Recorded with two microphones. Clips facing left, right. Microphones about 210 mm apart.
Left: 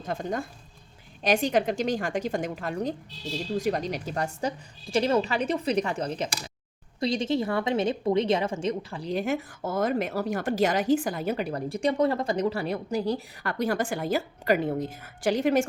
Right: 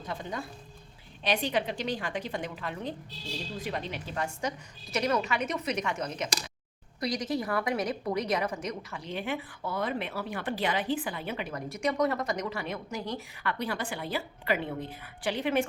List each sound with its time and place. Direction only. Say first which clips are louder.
0.0 s a woman's voice: left 6 dB; 50° left (ahead or behind)